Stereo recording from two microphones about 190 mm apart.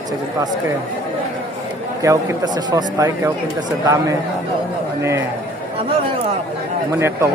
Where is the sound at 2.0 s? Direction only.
15° right (ahead or behind).